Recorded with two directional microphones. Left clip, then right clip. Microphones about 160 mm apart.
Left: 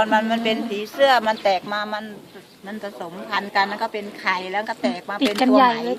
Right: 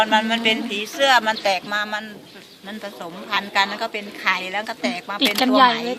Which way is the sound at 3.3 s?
40° left (ahead or behind).